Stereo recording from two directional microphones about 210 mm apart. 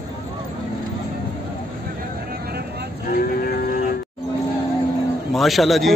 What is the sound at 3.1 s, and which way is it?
Vehicle, 40° left (ahead or behind).